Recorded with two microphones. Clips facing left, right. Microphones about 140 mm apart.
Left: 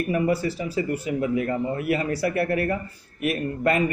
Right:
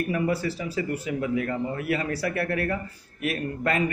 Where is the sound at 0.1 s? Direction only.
25° left (ahead or behind).